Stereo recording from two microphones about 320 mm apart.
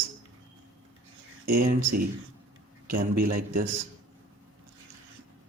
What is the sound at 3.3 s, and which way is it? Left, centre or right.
Speech, right.